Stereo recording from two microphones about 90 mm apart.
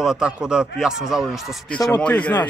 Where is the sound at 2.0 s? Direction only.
10° left (ahead or behind).